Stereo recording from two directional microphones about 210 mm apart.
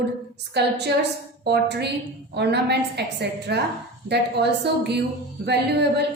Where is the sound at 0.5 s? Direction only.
50° right (ahead or behind).